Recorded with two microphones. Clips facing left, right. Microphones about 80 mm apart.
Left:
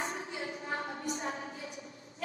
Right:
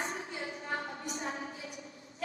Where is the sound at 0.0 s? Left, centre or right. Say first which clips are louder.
Left 1 dB; left.